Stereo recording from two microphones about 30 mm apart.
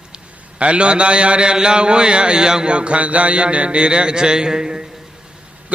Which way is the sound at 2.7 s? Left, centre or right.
Right.